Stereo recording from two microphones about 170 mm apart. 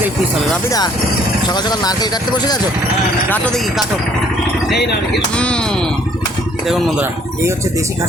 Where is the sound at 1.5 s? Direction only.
25° left (ahead or behind).